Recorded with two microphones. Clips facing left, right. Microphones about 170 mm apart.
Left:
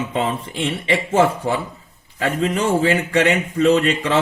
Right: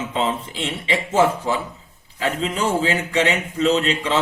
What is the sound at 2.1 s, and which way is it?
A man's voice, 60° left (ahead or behind).